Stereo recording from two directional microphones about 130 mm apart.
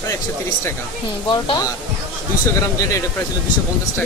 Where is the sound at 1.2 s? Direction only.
35° left (ahead or behind).